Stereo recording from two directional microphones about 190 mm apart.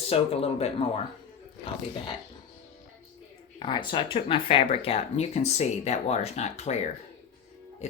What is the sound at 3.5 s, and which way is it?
Speech, 25° left (ahead or behind).